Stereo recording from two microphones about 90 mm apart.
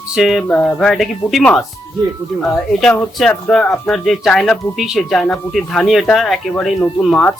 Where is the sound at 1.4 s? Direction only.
10° left (ahead or behind).